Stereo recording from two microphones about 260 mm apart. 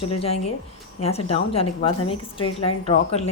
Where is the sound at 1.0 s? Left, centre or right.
Left.